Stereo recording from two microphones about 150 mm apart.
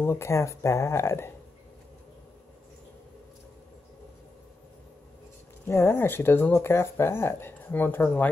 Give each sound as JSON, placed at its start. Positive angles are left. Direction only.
{"t": 0.0, "sound": "speech", "side_deg": 15}
{"t": 5.7, "sound": "speech", "side_deg": 15}